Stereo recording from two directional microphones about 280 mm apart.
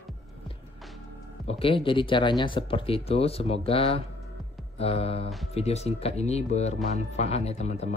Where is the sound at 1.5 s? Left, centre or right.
Centre.